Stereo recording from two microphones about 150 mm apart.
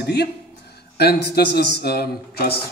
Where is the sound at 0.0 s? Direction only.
90° left.